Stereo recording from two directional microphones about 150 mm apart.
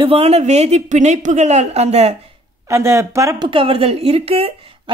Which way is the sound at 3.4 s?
35° right (ahead or behind).